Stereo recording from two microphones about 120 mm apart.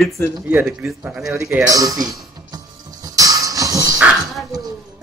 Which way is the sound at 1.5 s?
25° right (ahead or behind).